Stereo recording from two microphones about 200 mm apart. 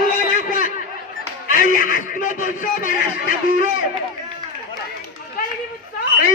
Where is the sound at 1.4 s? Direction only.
40° left (ahead or behind).